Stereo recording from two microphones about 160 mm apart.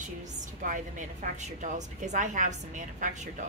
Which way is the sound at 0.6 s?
55° right (ahead or behind).